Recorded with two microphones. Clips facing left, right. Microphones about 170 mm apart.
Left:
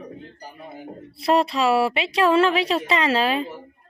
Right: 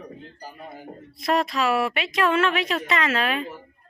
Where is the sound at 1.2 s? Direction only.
30° left (ahead or behind).